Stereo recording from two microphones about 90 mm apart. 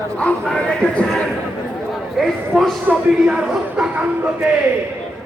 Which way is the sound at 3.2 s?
5° right (ahead or behind).